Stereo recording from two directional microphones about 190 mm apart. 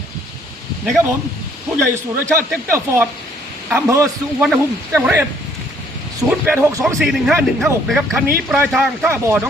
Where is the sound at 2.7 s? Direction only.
15° right (ahead or behind).